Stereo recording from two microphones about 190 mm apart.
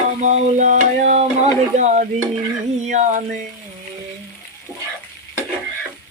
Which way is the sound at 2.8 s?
40° right (ahead or behind).